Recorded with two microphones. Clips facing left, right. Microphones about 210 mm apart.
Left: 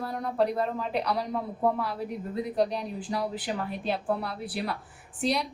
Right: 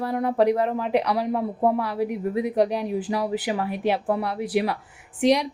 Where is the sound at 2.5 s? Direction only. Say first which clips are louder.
Right 3 dB; 75° right (ahead or behind); by 5.4 s 90° right.